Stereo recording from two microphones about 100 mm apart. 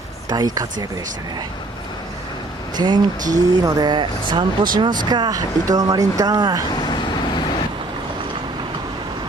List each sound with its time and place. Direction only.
0.3 s speech: 40° right (ahead or behind)
2.7 s speech: 45° right (ahead or behind)